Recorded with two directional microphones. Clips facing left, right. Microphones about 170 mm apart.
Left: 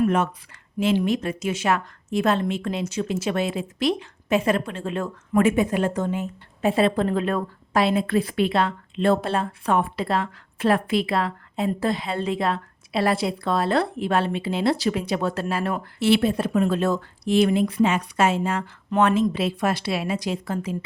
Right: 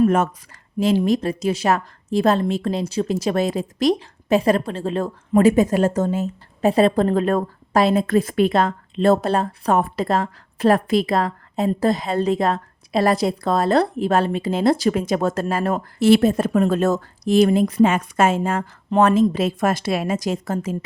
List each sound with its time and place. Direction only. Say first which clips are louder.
0.8 s a woman's voice: right 3 dB; 40° right (ahead or behind)